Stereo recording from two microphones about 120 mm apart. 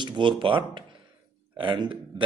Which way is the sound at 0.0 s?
40° right (ahead or behind).